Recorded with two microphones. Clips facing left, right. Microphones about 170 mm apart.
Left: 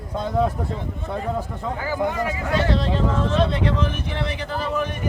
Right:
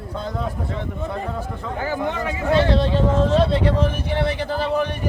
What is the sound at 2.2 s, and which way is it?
Speech, 30° right (ahead or behind).